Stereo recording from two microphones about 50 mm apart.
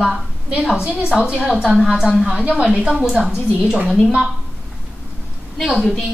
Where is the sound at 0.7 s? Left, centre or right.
Centre.